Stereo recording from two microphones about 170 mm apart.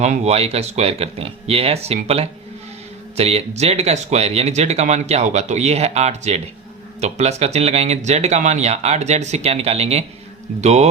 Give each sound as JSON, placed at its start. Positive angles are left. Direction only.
{"t": 0.0, "sound": "speech", "side_deg": -40}